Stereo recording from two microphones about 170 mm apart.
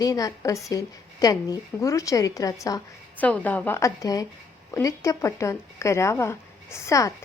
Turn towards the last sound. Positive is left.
turn(degrees=20)  # may be behind; listen again after turning